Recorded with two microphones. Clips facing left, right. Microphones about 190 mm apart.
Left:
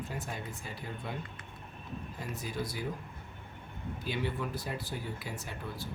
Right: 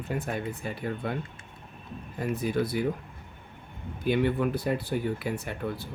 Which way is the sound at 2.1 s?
60° right (ahead or behind).